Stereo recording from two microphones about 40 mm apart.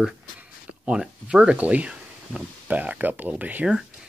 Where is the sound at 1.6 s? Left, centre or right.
Right.